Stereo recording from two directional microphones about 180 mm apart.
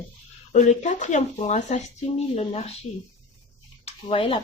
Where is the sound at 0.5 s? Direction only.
40° left (ahead or behind).